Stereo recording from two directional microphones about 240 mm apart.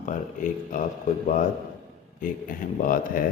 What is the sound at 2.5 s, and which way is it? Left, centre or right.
Speech, left.